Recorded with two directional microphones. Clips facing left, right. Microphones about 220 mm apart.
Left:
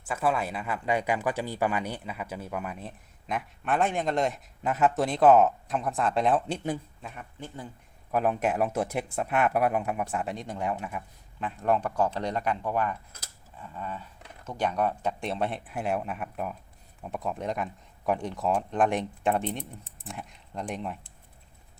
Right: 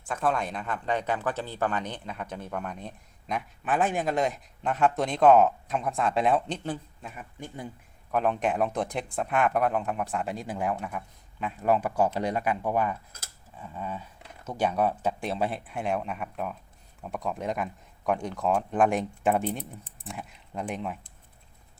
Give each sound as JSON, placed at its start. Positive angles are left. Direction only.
{"t": 0.0, "sound": "speech", "side_deg": 5}
{"t": 7.3, "sound": "speech", "side_deg": -15}
{"t": 8.1, "sound": "speech", "side_deg": 5}